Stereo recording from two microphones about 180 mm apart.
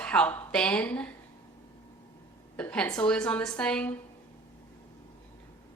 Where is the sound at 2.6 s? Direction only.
10° left (ahead or behind).